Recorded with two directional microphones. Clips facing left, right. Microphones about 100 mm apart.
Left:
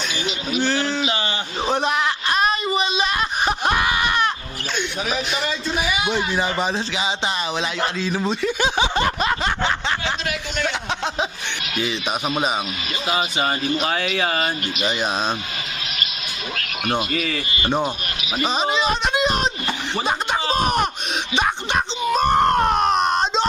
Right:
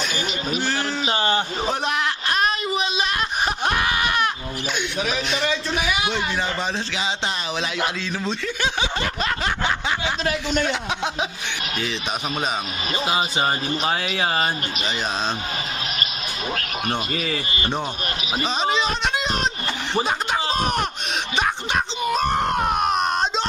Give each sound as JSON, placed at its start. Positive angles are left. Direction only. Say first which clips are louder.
{"t": 0.6, "sound": "a sound", "louder": "left 6 dB", "side_deg": -5}
{"t": 1.0, "sound": "a sound", "louder": "right 2 dB", "side_deg": -40}
{"t": 1.6, "sound": "a sound", "louder": "left 3 dB", "side_deg": 0}
{"t": 4.8, "sound": "a man's voice", "louder": "left 2 dB", "side_deg": 0}
{"t": 10.7, "sound": "a man's voice", "louder": "even", "side_deg": -5}
{"t": 13.1, "sound": "speech", "louder": "left 1 dB", "side_deg": -30}
{"t": 17.1, "sound": "speech", "louder": "left 1 dB", "side_deg": -25}
{"t": 18.4, "sound": "speech", "louder": "left 2 dB", "side_deg": 0}
{"t": 21.3, "sound": "screaming", "louder": "left 2 dB", "side_deg": 0}